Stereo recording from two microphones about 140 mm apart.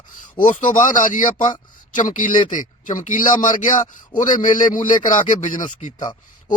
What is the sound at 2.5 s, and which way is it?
Speech, 65° left (ahead or behind).